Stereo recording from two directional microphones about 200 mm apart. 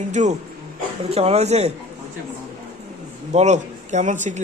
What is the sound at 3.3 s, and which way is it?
Speech, 35° right (ahead or behind).